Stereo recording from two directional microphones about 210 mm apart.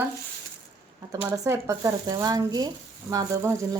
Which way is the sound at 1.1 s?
15° right (ahead or behind).